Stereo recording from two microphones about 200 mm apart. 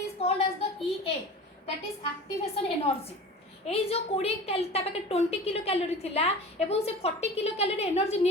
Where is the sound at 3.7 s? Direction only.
30° left (ahead or behind).